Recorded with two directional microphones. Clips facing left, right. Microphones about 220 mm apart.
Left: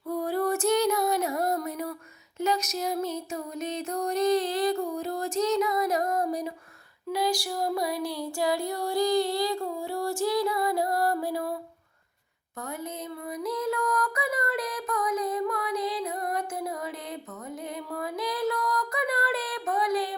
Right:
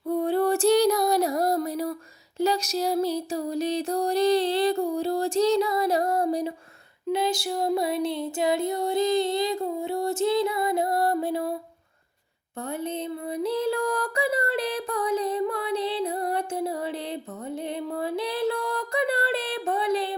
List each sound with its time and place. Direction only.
0.1 s music: 25° right (ahead or behind)
7.1 s female singing: 25° right (ahead or behind)
12.8 s music: 30° right (ahead or behind)